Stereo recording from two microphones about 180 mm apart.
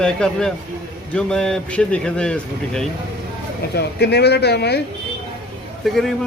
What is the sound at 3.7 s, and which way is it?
Speech, 65° left (ahead or behind).